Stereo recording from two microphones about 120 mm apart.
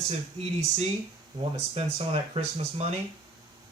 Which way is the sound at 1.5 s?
60° right (ahead or behind).